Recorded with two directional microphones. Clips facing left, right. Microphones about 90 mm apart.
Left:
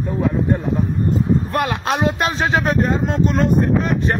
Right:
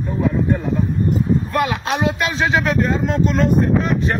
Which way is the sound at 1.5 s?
50° left (ahead or behind).